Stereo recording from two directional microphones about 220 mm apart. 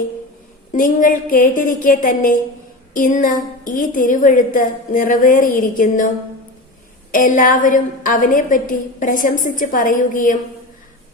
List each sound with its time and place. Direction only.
0.7 s a woman's voice: 35° left (ahead or behind)
7.1 s a woman's voice: 35° left (ahead or behind)